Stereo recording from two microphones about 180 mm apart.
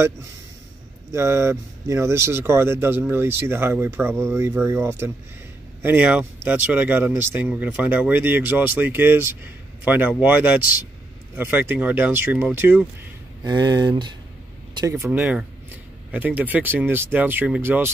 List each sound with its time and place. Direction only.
1.1 s speech: 15° right (ahead or behind)
13.4 s speech: 20° right (ahead or behind)